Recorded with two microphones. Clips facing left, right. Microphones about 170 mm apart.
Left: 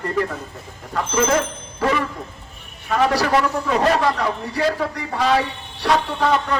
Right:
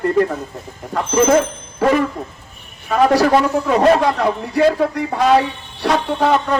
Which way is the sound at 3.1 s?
50° right (ahead or behind).